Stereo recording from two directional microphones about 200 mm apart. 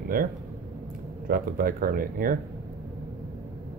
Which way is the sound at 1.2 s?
45° right (ahead or behind).